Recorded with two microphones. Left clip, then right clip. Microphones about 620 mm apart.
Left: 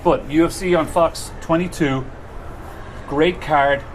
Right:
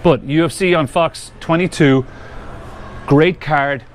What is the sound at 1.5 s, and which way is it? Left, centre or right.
Speech, right.